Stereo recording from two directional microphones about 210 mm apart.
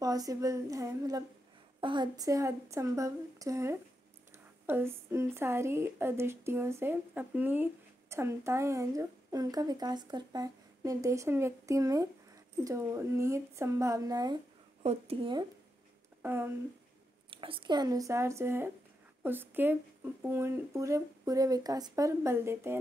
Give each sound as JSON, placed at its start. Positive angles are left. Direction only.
{"t": 0.0, "sound": "a woman's voice", "side_deg": -15}
{"t": 16.2, "sound": "speech", "side_deg": -10}
{"t": 17.3, "sound": "a woman's voice", "side_deg": -25}